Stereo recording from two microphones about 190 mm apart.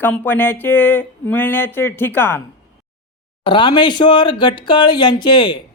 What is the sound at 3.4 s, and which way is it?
Speech, 25° left (ahead or behind).